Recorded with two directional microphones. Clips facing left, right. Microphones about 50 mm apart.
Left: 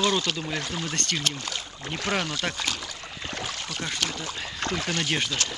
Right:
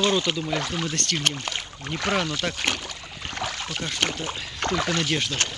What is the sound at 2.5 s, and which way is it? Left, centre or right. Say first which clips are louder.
Speech: right 3 dB; right.